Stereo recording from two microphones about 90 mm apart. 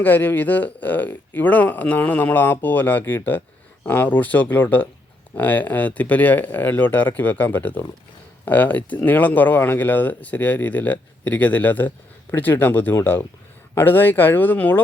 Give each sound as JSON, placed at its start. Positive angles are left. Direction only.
{"t": 0.0, "sound": "speech", "side_deg": 20}